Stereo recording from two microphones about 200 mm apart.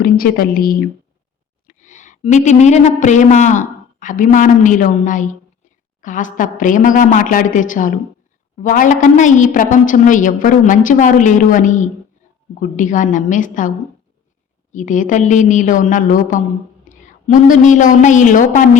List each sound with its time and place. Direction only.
0.0 s a woman's voice: 50° left (ahead or behind)